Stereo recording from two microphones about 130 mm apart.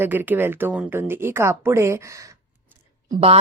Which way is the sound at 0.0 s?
15° right (ahead or behind).